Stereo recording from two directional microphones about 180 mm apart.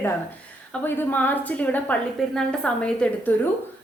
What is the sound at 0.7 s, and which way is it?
A woman's voice, 10° left (ahead or behind).